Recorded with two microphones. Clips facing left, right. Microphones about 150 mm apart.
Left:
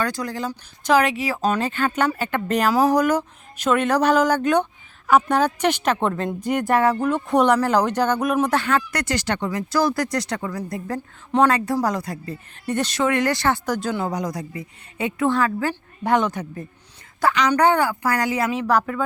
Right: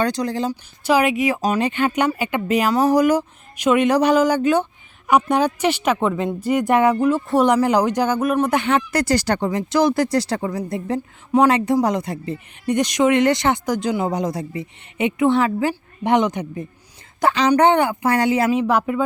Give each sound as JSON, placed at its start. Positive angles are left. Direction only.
{"t": 0.0, "sound": "speech", "side_deg": -20}
{"t": 0.9, "sound": "speech", "side_deg": -10}
{"t": 2.6, "sound": "speech", "side_deg": 0}
{"t": 2.9, "sound": "speech", "side_deg": -10}
{"t": 6.7, "sound": "speech", "side_deg": -20}
{"t": 7.1, "sound": "speech", "side_deg": -5}
{"t": 8.5, "sound": "speech", "side_deg": -20}
{"t": 9.5, "sound": "speech", "side_deg": -25}
{"t": 11.3, "sound": "speech", "side_deg": -10}
{"t": 18.8, "sound": "speech", "side_deg": -15}